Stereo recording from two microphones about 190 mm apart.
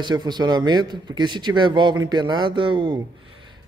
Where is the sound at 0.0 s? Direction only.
20° right (ahead or behind).